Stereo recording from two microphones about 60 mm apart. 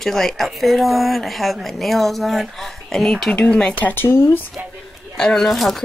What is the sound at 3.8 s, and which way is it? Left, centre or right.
Speech, left.